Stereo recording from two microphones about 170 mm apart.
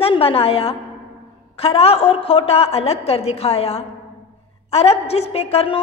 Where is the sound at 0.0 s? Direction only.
35° left (ahead or behind).